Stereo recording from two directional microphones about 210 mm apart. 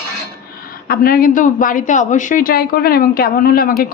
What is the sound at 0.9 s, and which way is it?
A woman's voice, 45° left (ahead or behind).